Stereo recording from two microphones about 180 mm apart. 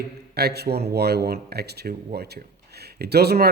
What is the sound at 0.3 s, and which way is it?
Speech, 65° right (ahead or behind).